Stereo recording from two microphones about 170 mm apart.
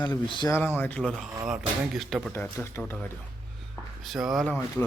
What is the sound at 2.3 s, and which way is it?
Speech, 15° left (ahead or behind).